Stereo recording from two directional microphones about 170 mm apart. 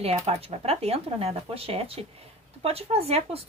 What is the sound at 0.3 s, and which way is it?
Speech, 35° right (ahead or behind).